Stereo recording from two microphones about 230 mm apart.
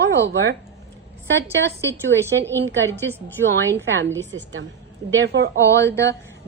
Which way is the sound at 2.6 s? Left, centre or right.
Right.